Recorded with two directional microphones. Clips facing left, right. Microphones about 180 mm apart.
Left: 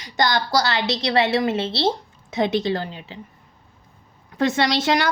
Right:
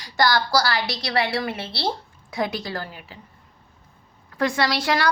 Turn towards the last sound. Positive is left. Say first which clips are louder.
# left 3 dB
turn(degrees=25)  # may be behind; listen again after turning